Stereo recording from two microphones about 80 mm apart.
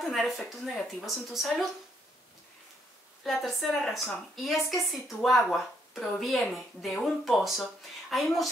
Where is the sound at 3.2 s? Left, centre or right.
Centre.